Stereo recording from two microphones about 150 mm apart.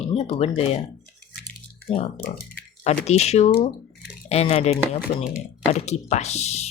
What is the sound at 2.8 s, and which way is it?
Speech, 50° left (ahead or behind).